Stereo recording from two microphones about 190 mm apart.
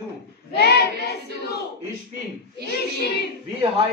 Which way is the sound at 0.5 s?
60° left (ahead or behind).